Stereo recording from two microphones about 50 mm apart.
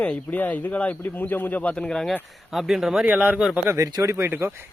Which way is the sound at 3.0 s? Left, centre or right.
Right.